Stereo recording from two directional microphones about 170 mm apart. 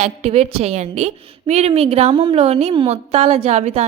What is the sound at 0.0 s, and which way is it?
A woman's voice, 35° right (ahead or behind).